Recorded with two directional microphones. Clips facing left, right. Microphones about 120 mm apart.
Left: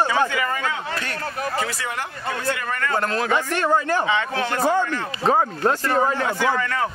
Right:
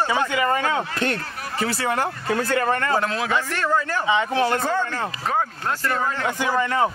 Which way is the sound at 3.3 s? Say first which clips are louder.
Left 4 dB; 15° left (ahead or behind).